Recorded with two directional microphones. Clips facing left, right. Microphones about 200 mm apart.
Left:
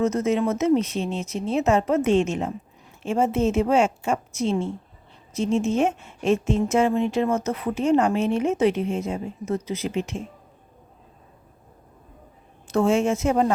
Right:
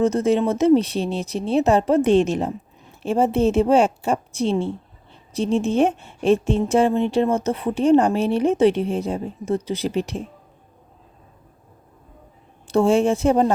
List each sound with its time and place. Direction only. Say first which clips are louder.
0.0 s speech: right 3 dB; 30° right (ahead or behind)
12.6 s speech: right 3 dB; 30° right (ahead or behind)